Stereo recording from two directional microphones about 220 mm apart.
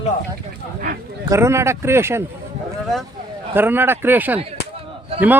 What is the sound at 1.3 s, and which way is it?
Speech, 10° right (ahead or behind).